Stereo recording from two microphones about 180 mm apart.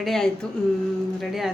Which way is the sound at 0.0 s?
Centre (ahead or behind).